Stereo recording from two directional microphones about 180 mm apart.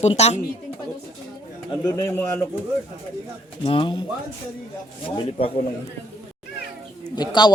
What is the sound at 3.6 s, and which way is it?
Speech, 30° left (ahead or behind).